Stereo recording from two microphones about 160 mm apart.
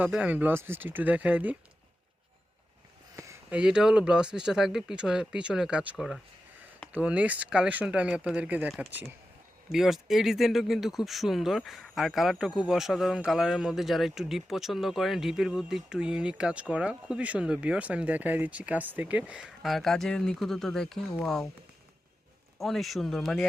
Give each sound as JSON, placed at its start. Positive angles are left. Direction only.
{"t": 0.0, "sound": "speech", "side_deg": -10}
{"t": 3.5, "sound": "speech", "side_deg": -5}
{"t": 22.5, "sound": "speech", "side_deg": 0}